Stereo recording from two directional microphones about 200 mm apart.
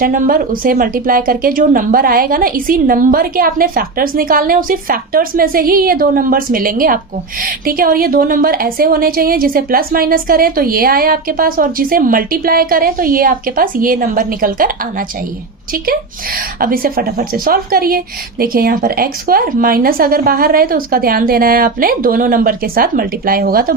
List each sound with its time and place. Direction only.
0.0 s a woman's voice: 45° right (ahead or behind)